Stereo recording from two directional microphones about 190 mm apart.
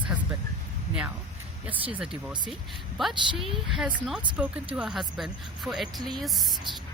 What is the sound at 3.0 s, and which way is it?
Speech, centre (ahead or behind).